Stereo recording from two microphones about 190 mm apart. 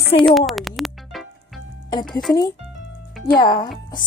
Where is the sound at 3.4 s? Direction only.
20° left (ahead or behind).